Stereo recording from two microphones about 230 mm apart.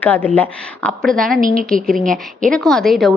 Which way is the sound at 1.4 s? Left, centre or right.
Right.